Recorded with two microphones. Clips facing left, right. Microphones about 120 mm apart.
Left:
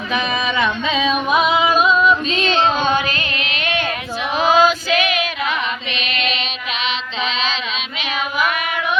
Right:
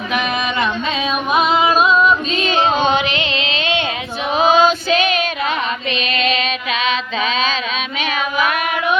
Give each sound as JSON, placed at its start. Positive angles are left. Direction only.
{"t": 2.4, "sound": "music", "side_deg": -10}
{"t": 4.4, "sound": "female singing", "side_deg": -20}
{"t": 6.0, "sound": "child singing", "side_deg": -40}